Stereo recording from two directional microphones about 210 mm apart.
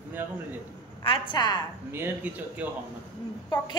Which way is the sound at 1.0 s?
25° left (ahead or behind).